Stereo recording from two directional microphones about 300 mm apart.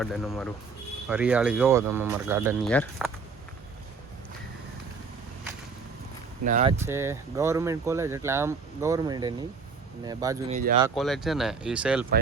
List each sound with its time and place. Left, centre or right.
0.0 s speech: centre
2.6 s speech: centre
6.4 s speech: right
6.7 s speech: centre
10.5 s speech: right
10.9 s speech: centre